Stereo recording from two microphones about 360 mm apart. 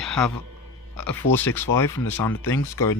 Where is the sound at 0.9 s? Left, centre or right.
Left.